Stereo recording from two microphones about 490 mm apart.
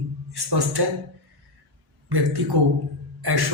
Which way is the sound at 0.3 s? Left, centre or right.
Right.